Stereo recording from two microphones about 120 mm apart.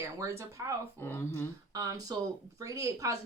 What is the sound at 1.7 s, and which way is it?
Speech, 30° right (ahead or behind).